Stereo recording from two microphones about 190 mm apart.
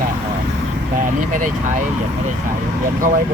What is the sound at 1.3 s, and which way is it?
Speech, 45° right (ahead or behind).